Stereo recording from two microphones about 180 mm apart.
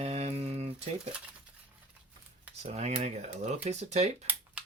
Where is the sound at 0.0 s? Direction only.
35° right (ahead or behind).